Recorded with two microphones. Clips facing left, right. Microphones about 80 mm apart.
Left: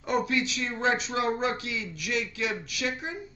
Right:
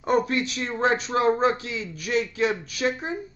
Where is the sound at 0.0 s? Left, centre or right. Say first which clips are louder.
Right 4 dB; right.